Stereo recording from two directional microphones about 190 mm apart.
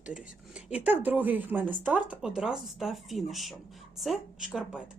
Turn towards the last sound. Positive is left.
turn(degrees=-5)  # may be behind; listen again after turning